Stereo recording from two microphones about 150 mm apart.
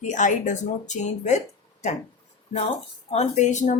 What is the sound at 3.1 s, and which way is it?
Speech, 50° left (ahead or behind).